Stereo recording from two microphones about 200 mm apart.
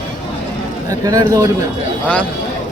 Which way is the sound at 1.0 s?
15° right (ahead or behind).